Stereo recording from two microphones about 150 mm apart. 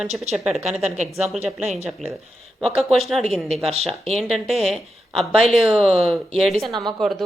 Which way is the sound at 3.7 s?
45° right (ahead or behind).